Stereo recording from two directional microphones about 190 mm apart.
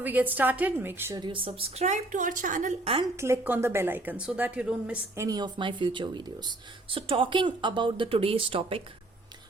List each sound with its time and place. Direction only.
0.0 s a woman's voice: 10° right (ahead or behind); by 3.0 s 35° right (ahead or behind)
3.2 s a woman's voice: 15° right (ahead or behind); by 8.8 s 30° right (ahead or behind)